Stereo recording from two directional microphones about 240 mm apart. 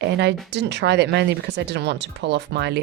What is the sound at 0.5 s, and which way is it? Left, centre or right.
Speech, right.